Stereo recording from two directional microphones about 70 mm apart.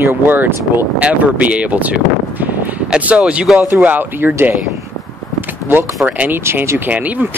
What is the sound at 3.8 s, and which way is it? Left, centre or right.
Speech, right.